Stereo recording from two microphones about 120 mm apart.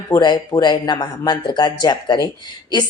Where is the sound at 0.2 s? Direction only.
35° left (ahead or behind).